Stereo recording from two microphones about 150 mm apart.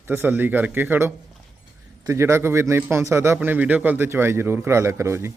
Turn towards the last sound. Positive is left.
turn(degrees=-20)  # may be behind; listen again after turning